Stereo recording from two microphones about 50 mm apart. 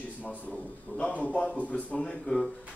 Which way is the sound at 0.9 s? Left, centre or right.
Left.